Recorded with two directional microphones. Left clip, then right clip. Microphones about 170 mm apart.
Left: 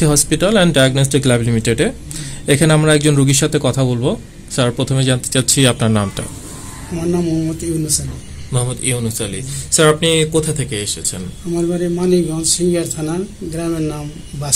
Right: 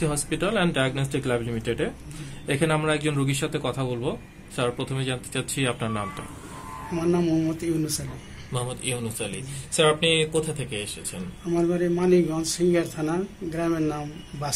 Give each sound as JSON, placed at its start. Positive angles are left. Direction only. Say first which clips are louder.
{"t": 0.0, "sound": "a man's voice", "louder": "left 11 dB", "side_deg": 90}
{"t": 7.0, "sound": "a man's voice", "louder": "left 5 dB", "side_deg": 0}
{"t": 8.5, "sound": "speech", "louder": "left 9 dB", "side_deg": 35}
{"t": 11.5, "sound": "a man's voice", "louder": "left 5 dB", "side_deg": 5}